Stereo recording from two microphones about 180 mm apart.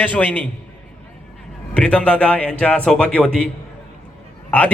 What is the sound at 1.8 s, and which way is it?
A man's voice, 5° left (ahead or behind).